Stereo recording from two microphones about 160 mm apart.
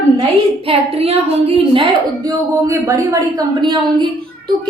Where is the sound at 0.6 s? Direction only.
35° right (ahead or behind).